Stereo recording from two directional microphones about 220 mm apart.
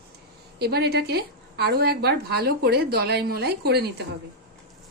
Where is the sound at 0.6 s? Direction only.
50° right (ahead or behind).